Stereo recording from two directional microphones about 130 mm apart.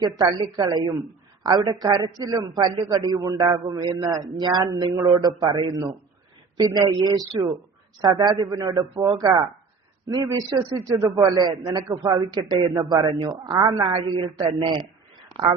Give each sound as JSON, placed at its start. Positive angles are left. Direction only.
{"t": 0.0, "sound": "a man's voice", "side_deg": -30}